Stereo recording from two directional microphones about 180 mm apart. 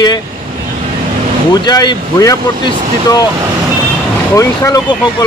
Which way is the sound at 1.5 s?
25° left (ahead or behind).